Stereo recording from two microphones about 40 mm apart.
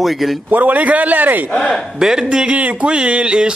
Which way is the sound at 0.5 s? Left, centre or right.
Right.